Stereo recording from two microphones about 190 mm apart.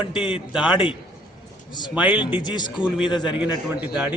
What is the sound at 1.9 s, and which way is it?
Speech, 10° right (ahead or behind).